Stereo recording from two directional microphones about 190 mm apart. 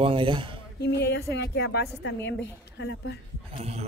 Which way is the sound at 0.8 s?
60° left (ahead or behind).